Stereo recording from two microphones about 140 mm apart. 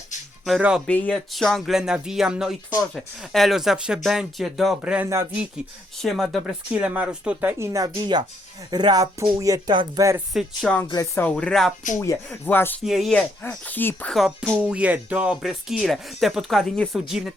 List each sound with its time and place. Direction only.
0.4 s speech: 5° right (ahead or behind)
0.9 s speech: 10° left (ahead or behind); by 5.0 s 10° right (ahead or behind)
5.0 s speech: 20° right (ahead or behind)
6.0 s speech: centre (ahead or behind)
7.6 s speech: 20° right (ahead or behind)
7.9 s speech: 35° right (ahead or behind)
10.3 s speech: centre (ahead or behind)
10.8 s speech: 25° left (ahead or behind)
11.3 s speech: 5° left (ahead or behind)
11.9 s speech: 15° left (ahead or behind)
12.8 s speech: centre (ahead or behind)
13.1 s speech: 10° left (ahead or behind)
14.1 s speech: centre (ahead or behind)